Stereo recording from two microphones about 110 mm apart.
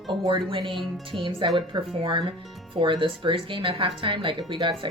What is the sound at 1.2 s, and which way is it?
Speech, 50° right (ahead or behind).